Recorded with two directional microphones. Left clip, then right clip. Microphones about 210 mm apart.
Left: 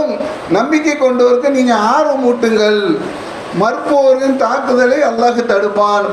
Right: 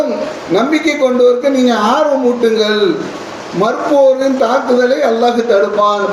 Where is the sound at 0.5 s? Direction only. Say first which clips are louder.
Even; 15° left (ahead or behind).